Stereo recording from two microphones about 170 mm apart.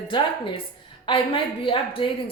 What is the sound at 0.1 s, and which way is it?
A woman's voice, 30° left (ahead or behind).